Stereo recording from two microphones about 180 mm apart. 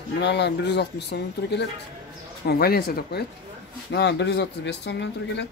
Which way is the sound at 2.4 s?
60° left (ahead or behind).